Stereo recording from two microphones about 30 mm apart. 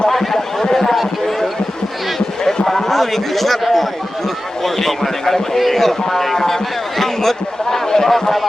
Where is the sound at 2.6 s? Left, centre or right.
Centre.